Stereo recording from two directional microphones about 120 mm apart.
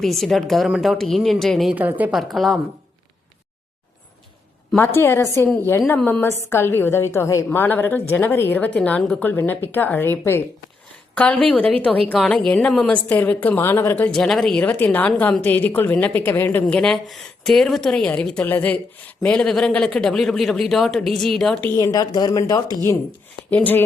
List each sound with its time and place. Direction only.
0.0 s a woman's voice: centre (ahead or behind)
1.7 s a woman's voice: 15° right (ahead or behind)
2.1 s a woman's voice: centre (ahead or behind)
4.7 s a woman's voice: 15° left (ahead or behind)
9.2 s a woman's voice: 15° left (ahead or behind)
14.2 s speech: 5° left (ahead or behind)
21.8 s speech: 30° left (ahead or behind)
23.5 s speech: 15° left (ahead or behind)